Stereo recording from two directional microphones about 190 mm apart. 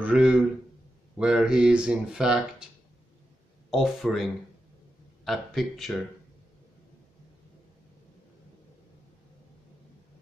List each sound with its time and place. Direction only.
0.0 s speech: 5° right (ahead or behind)
3.7 s speech: centre (ahead or behind)